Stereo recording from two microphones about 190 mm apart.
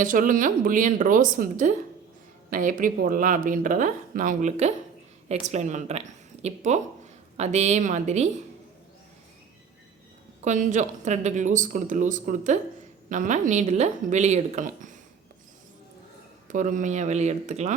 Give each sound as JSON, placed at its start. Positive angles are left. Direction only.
{"t": 0.0, "sound": "a woman's voice", "side_deg": -45}
{"t": 10.4, "sound": "speech", "side_deg": -40}
{"t": 16.5, "sound": "speech", "side_deg": -45}